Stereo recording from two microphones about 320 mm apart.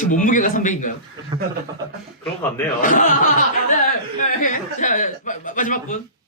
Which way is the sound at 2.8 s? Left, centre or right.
Left.